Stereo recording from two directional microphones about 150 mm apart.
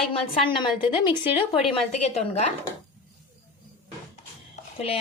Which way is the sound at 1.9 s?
45° left (ahead or behind).